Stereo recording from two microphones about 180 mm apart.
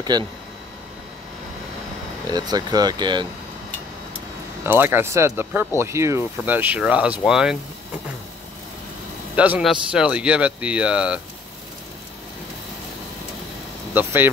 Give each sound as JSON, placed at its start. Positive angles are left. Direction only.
{"t": 2.3, "sound": "speech", "side_deg": -20}
{"t": 4.6, "sound": "speech", "side_deg": -10}
{"t": 9.3, "sound": "a man's voice", "side_deg": -5}
{"t": 13.9, "sound": "speech", "side_deg": -10}